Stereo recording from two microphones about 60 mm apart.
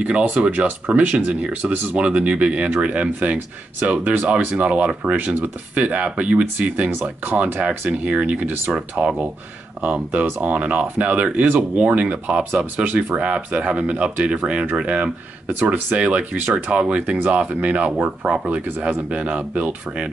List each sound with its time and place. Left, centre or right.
0.0 s speech: right
8.0 s speech: right